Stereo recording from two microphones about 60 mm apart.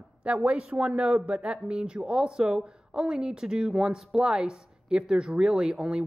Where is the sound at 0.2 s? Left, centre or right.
Right.